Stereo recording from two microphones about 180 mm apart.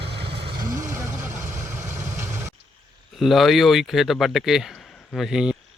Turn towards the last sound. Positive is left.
turn(degrees=-5)  # may be behind; listen again after turning